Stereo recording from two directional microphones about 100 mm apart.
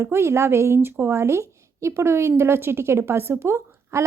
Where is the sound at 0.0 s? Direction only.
25° right (ahead or behind).